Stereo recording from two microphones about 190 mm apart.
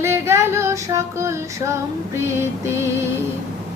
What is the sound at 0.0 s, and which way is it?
Female singing, 15° right (ahead or behind).